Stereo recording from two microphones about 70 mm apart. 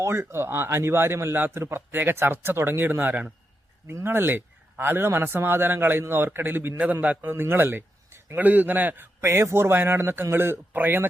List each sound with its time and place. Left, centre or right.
0.0 s a man's voice: right
9.2 s speech: right